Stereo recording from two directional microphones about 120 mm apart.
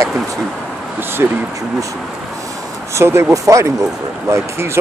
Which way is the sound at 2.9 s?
25° right (ahead or behind).